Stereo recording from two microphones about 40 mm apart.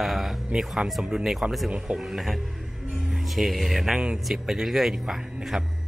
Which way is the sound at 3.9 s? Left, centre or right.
Centre.